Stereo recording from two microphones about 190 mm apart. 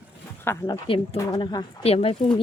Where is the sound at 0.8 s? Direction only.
30° left (ahead or behind).